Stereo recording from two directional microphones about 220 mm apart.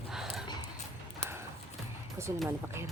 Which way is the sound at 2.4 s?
10° right (ahead or behind).